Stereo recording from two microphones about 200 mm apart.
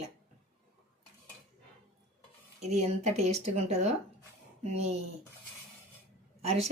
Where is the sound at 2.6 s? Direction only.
35° right (ahead or behind).